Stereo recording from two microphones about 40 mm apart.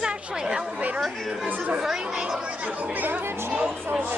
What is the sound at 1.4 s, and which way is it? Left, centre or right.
Speech, right.